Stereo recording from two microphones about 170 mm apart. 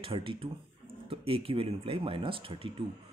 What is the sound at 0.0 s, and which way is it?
Speech, 30° right (ahead or behind).